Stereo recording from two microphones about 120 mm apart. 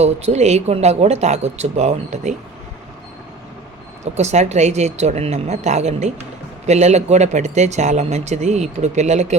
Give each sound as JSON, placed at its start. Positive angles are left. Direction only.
{"t": 0.0, "sound": "speech", "side_deg": -65}
{"t": 4.0, "sound": "speech", "side_deg": -70}